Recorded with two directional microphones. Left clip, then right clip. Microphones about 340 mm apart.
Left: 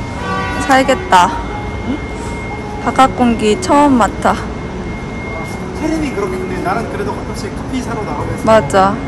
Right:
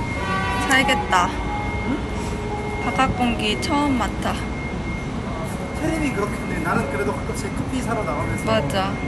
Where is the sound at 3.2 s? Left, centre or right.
Centre.